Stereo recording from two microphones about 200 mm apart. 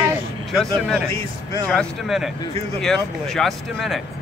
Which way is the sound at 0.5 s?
Centre (ahead or behind).